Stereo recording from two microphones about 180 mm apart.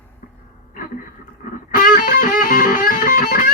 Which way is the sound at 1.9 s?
55° left (ahead or behind).